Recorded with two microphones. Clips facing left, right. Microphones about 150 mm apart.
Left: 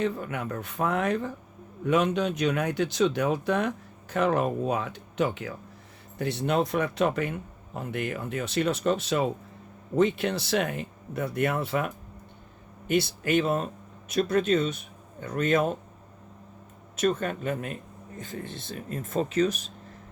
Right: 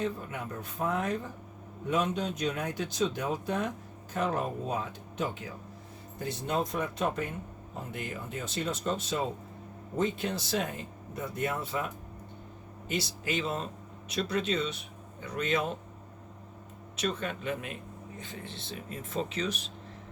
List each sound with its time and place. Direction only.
0.0 s speech: 75° left (ahead or behind)
12.9 s speech: 60° left (ahead or behind)
17.0 s speech: 50° left (ahead or behind)